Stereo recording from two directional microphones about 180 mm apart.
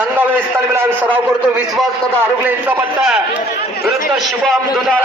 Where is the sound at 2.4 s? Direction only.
10° right (ahead or behind).